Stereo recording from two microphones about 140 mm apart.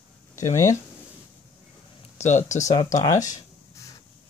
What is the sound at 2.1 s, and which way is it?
Speech, 60° left (ahead or behind).